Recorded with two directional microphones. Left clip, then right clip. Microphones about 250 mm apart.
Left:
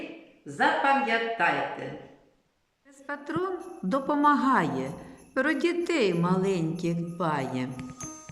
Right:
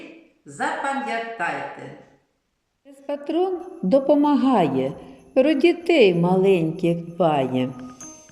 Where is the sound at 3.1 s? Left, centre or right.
Left.